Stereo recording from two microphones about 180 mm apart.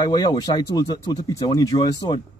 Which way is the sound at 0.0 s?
20° left (ahead or behind).